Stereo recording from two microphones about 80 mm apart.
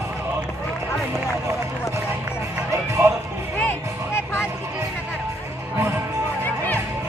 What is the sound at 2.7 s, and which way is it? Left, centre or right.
Music, right.